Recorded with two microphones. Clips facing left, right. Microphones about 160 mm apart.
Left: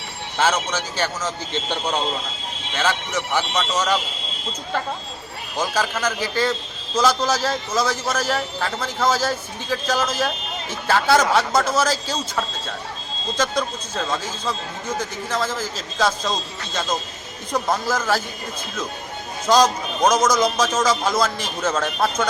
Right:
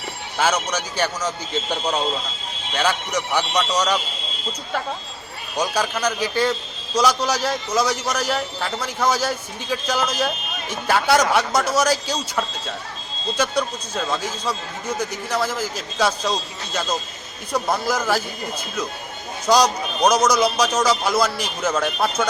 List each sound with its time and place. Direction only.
0.3 s a man's voice: 10° right (ahead or behind)
3.3 s a man's voice: 15° right (ahead or behind)
5.5 s a man's voice: 15° right (ahead or behind)
13.3 s a man's voice: 10° right (ahead or behind)
17.5 s a man's voice: 10° right (ahead or behind)
19.5 s a man's voice: 10° right (ahead or behind)